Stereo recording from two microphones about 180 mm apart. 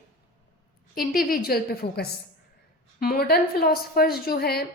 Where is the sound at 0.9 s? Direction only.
55° left (ahead or behind).